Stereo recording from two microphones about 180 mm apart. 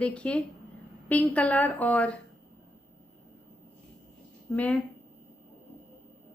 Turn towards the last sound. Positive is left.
turn(degrees=10)  # may be behind; listen again after turning